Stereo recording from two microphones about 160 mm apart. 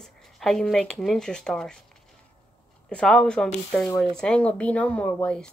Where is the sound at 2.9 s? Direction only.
5° left (ahead or behind).